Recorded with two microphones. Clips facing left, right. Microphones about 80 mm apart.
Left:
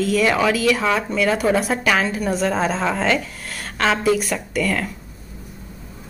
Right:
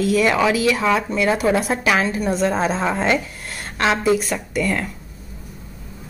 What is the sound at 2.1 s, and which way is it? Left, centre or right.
A woman's voice, centre.